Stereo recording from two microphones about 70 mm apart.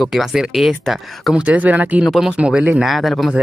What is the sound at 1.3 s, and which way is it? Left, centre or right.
Speech, centre.